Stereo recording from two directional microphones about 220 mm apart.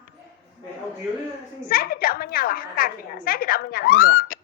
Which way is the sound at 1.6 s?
40° left (ahead or behind).